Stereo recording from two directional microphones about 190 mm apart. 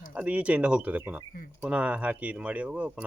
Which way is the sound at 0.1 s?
5° right (ahead or behind).